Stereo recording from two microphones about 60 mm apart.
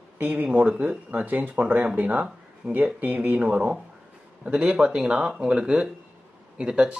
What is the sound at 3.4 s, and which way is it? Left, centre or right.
Speech, centre.